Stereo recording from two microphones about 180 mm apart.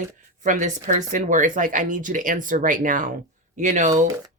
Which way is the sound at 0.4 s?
45° right (ahead or behind).